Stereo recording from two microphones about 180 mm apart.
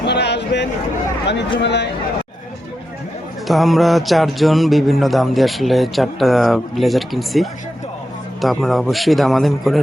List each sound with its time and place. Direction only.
0.0 s a sound: 70° left (ahead or behind)
1.5 s speech: 70° left (ahead or behind)
3.4 s music: centre (ahead or behind)